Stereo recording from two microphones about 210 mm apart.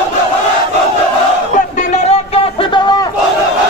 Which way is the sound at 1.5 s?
35° left (ahead or behind).